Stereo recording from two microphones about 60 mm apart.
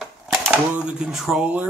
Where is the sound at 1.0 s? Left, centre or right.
Centre.